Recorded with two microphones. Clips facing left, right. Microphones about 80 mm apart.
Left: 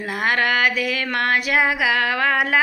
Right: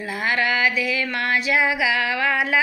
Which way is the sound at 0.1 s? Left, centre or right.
Left.